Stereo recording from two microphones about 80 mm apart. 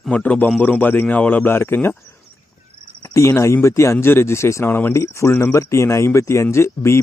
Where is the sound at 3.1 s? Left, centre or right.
Left.